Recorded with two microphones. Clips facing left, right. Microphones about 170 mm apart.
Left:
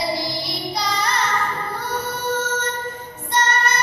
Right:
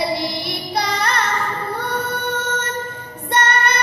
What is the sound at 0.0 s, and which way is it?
Music, 60° right (ahead or behind).